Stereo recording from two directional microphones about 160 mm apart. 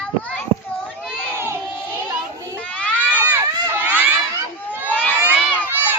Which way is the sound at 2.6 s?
10° left (ahead or behind).